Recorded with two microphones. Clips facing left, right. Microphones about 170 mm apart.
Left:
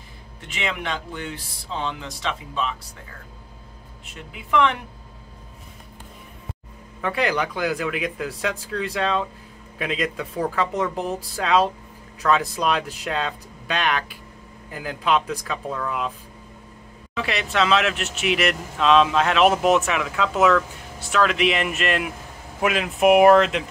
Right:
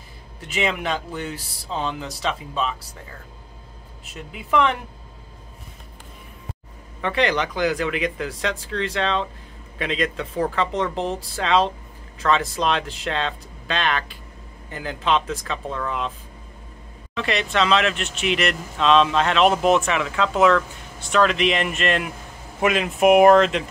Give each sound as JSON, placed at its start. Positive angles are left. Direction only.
{"t": 0.6, "sound": "speech", "side_deg": -40}
{"t": 7.0, "sound": "speech", "side_deg": 5}
{"t": 17.1, "sound": "speech", "side_deg": 5}